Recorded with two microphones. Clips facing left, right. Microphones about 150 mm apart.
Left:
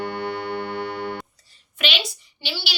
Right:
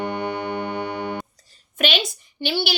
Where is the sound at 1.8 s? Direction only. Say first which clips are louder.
Right 4 dB; 50° right (ahead or behind).